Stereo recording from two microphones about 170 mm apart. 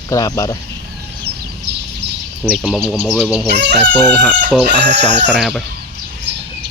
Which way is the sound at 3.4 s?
85° right.